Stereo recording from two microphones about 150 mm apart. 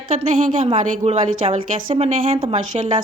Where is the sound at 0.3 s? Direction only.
60° right (ahead or behind).